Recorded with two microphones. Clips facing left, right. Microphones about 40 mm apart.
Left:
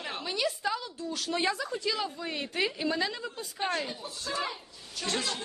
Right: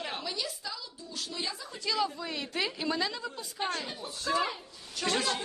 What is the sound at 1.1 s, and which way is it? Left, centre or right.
Speech, left.